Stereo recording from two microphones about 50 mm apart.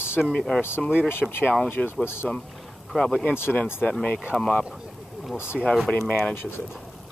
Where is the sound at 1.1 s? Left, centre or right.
Left.